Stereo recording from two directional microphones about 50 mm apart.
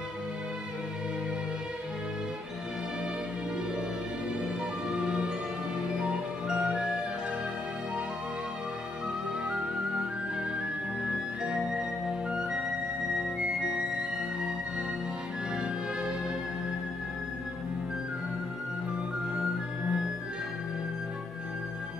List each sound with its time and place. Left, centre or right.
4.8 s music: centre
11.1 s music: centre
15.5 s music: centre
19.3 s music: right